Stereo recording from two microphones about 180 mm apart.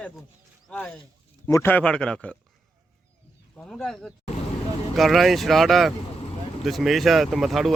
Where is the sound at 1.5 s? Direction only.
15° left (ahead or behind).